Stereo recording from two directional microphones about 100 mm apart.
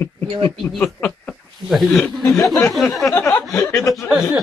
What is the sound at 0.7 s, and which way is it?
Speech, 10° left (ahead or behind).